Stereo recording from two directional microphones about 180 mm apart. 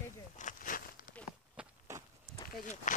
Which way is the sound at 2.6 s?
45° left (ahead or behind).